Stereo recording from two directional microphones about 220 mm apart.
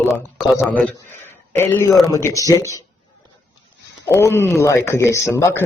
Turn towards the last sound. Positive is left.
turn(degrees=15)  # may be behind; listen again after turning